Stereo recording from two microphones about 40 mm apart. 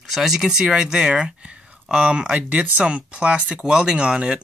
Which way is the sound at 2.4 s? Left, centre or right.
Right.